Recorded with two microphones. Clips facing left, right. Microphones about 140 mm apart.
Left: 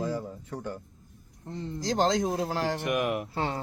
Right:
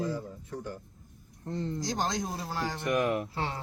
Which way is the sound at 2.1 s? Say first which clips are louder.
Left 7 dB; 85° left.